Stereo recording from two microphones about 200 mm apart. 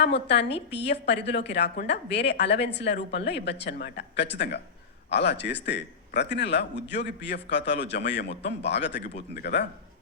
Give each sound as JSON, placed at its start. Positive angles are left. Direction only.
{"t": 0.0, "sound": "a woman's voice", "side_deg": 60}